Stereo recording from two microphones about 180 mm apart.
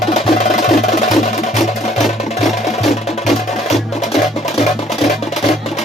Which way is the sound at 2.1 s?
35° left (ahead or behind).